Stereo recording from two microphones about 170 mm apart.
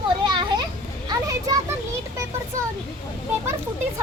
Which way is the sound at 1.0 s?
20° right (ahead or behind).